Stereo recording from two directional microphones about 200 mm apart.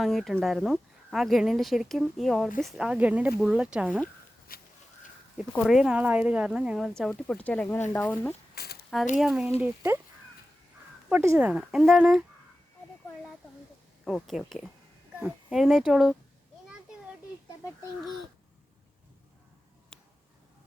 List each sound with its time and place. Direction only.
0.0 s speech: centre (ahead or behind)
4.5 s a sound: 45° left (ahead or behind)
5.5 s speech: centre (ahead or behind)
8.5 s a sound: 50° left (ahead or behind)
9.1 s speech: centre (ahead or behind)
11.1 s speech: 10° right (ahead or behind)
14.0 s speech: centre (ahead or behind)